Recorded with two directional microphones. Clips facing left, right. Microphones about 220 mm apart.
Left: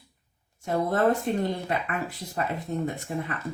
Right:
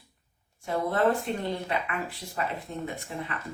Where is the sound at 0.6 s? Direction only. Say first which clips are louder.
Left 2 dB; 45° left (ahead or behind).